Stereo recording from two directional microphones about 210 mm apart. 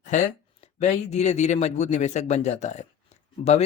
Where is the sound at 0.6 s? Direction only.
30° left (ahead or behind).